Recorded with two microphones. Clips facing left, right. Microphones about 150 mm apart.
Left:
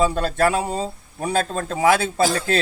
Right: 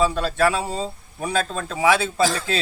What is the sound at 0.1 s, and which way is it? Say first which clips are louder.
Speech: left 1 dB; 45° left (ahead or behind).